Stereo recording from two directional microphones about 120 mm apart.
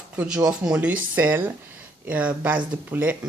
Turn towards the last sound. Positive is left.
turn(degrees=-15)  # may be behind; listen again after turning